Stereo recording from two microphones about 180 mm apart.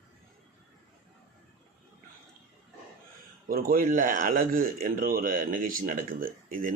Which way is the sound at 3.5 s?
55° right (ahead or behind).